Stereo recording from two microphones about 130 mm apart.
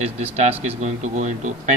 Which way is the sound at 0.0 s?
55° right (ahead or behind).